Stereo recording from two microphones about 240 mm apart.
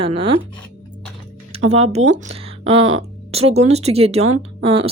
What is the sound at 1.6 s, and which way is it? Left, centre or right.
A woman's voice, right.